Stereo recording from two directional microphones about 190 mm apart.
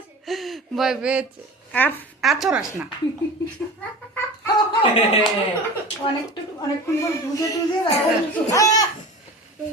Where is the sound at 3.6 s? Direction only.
5° left (ahead or behind).